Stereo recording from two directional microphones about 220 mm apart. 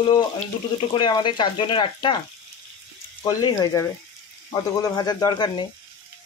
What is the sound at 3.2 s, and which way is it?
Speech, 15° left (ahead or behind).